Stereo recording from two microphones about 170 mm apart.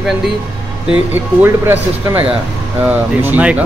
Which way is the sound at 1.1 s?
10° right (ahead or behind).